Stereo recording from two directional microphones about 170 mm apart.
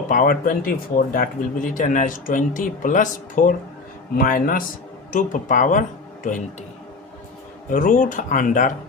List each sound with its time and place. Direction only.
0.1 s speech: 55° left (ahead or behind)
7.7 s speech: 55° left (ahead or behind)